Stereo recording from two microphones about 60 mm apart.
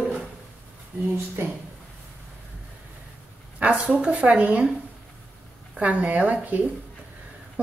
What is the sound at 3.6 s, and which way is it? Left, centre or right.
A woman's voice, right.